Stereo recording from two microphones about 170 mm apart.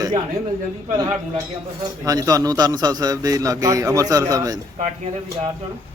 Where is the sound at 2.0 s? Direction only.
20° right (ahead or behind).